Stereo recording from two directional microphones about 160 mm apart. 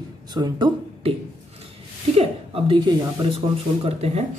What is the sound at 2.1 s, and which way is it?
A woman's voice, 35° right (ahead or behind).